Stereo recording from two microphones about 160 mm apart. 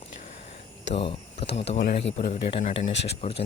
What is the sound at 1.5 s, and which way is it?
Speech, 90° left.